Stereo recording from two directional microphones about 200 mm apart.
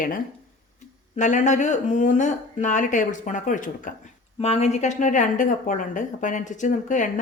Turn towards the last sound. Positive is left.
turn(degrees=40)  # may be behind; listen again after turning